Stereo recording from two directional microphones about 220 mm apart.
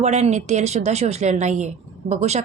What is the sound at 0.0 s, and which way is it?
A woman's voice, 30° right (ahead or behind).